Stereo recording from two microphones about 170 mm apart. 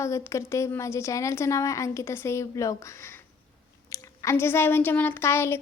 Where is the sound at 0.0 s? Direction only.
15° left (ahead or behind).